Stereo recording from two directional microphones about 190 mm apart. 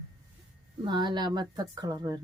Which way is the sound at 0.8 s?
25° right (ahead or behind).